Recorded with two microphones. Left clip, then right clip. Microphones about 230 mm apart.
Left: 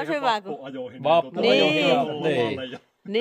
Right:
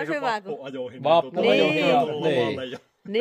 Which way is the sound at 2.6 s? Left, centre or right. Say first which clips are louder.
Right 1 dB; right.